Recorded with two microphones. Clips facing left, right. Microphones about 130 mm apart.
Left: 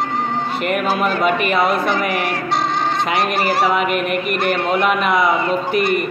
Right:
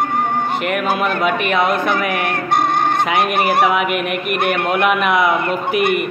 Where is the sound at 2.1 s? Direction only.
55° right (ahead or behind).